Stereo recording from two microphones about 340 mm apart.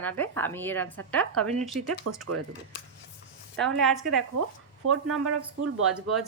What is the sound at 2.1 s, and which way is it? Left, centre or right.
Speech, right.